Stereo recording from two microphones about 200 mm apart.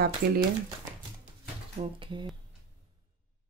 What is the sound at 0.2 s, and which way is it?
Speech, 50° right (ahead or behind).